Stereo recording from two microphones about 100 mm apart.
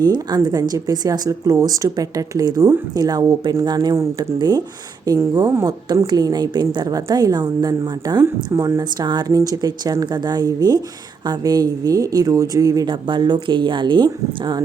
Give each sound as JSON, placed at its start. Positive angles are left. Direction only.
{"t": 0.0, "sound": "speech", "side_deg": -45}
{"t": 5.9, "sound": "speech", "side_deg": -40}
{"t": 8.8, "sound": "speech", "side_deg": -45}
{"t": 12.9, "sound": "speech", "side_deg": -50}